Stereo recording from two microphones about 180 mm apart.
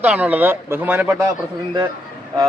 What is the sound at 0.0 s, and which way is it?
Speech, 10° right (ahead or behind).